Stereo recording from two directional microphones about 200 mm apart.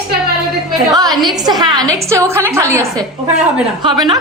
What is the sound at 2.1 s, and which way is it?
A woman's voice, 15° right (ahead or behind).